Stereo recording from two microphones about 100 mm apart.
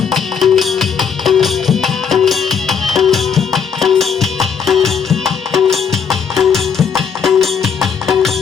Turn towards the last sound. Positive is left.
turn(degrees=0)  # may be behind; listen again after turning